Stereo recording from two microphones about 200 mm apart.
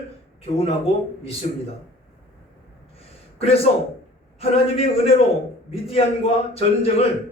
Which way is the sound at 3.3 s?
30° left (ahead or behind).